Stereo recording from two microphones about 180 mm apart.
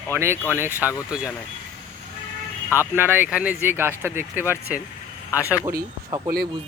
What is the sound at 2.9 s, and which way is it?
Speech, 10° right (ahead or behind).